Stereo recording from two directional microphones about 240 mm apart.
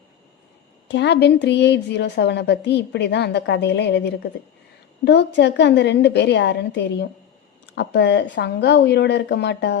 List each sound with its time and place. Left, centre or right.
0.9 s a woman's voice: left